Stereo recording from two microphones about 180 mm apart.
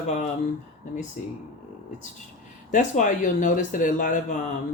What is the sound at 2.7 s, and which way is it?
Speech, 45° left (ahead or behind).